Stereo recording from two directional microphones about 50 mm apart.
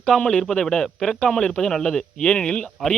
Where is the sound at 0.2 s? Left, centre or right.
Left.